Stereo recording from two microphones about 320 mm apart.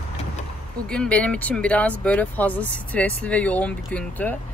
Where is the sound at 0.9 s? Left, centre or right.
Centre.